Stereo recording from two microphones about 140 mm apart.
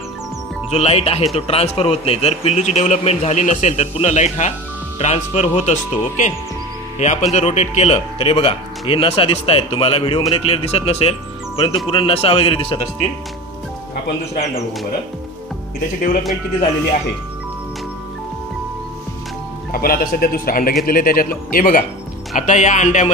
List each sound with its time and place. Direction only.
0.7 s a man's voice: 45° left (ahead or behind)
19.7 s speech: 90° left
22.3 s speech: 60° left (ahead or behind)